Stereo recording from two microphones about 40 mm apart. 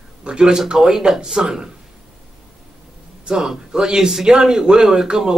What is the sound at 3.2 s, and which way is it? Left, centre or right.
Speech, centre.